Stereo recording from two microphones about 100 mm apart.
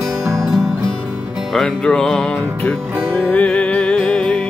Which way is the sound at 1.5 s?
5° left (ahead or behind).